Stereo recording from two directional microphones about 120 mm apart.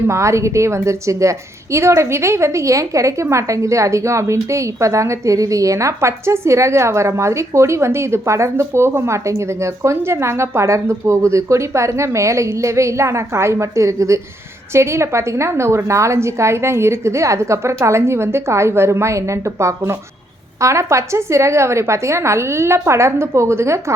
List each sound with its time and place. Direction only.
0.1 s a woman's voice: 25° right (ahead or behind)